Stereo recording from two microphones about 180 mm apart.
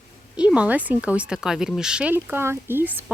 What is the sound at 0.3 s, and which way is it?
Speech, 5° right (ahead or behind).